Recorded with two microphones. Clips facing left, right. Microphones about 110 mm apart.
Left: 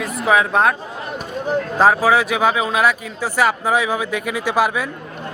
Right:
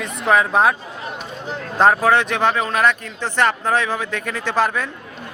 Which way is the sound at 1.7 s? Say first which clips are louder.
Even; 5° left (ahead or behind).